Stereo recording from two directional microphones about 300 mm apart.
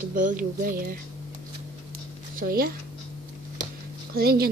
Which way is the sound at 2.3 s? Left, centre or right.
Right.